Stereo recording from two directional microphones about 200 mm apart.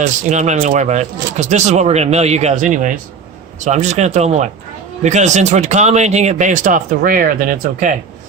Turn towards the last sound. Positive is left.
turn(degrees=-40)  # may be behind; listen again after turning